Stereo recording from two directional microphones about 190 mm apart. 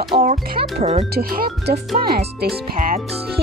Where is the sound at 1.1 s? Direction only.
55° right (ahead or behind).